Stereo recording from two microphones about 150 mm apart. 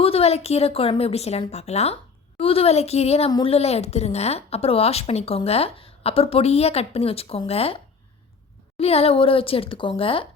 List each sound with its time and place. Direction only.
0.0 s a woman's voice: 40° left (ahead or behind)
8.8 s a woman's voice: 40° left (ahead or behind)